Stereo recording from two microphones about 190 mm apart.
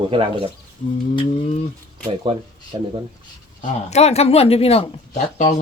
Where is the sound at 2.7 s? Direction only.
25° right (ahead or behind).